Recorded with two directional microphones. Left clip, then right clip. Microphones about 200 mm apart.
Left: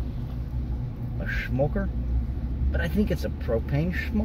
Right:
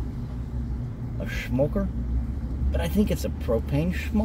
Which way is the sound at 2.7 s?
10° right (ahead or behind).